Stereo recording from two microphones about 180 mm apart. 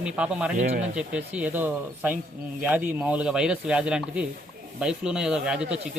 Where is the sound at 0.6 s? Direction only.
45° right (ahead or behind).